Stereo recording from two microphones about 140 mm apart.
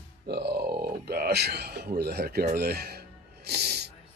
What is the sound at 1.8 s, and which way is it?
Speech, 90° right.